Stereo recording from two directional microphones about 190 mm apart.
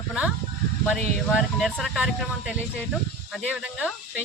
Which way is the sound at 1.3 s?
Centre (ahead or behind).